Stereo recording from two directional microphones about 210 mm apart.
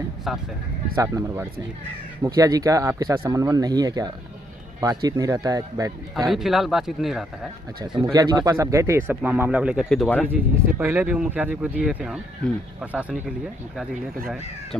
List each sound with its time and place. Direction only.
0.9 s speech: 15° right (ahead or behind)
6.1 s speech: centre (ahead or behind)
8.1 s speech: 15° right (ahead or behind); by 10.2 s 5° left (ahead or behind)
10.2 s speech: 10° right (ahead or behind)
13.7 s speech: centre (ahead or behind)